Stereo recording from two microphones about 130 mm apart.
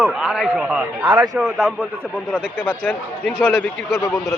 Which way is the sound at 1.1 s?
25° right (ahead or behind).